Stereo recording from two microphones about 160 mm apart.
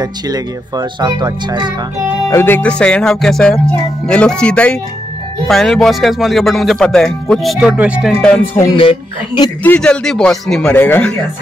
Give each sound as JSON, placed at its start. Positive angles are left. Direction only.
{"t": 0.0, "sound": "speech", "side_deg": -25}
{"t": 2.2, "sound": "speech", "side_deg": 15}
{"t": 8.7, "sound": "speech", "side_deg": 30}
{"t": 9.6, "sound": "speech", "side_deg": 10}